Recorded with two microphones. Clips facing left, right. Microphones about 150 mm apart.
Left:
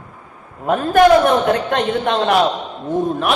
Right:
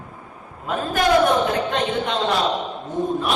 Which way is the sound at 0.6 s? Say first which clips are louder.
Left 9 dB; 55° left (ahead or behind).